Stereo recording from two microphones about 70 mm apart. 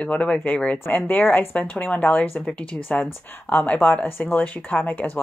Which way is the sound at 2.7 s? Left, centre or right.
Centre.